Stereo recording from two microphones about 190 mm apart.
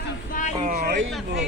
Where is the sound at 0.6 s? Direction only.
45° right (ahead or behind).